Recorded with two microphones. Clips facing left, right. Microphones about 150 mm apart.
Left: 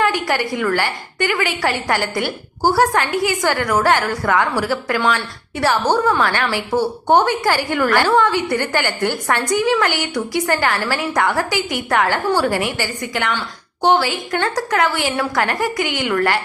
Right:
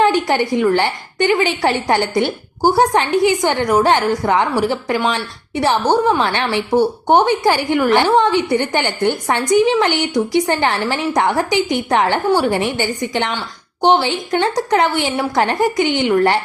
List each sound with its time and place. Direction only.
0.0 s a woman's voice: 25° right (ahead or behind)